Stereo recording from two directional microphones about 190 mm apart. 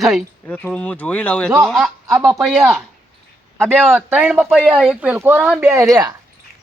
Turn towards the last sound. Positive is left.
turn(degrees=-20)  # may be behind; listen again after turning